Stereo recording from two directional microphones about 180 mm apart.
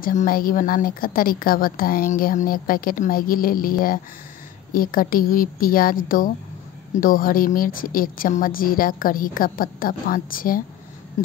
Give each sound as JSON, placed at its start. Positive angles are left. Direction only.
{"t": 0.0, "sound": "a woman's voice", "side_deg": 50}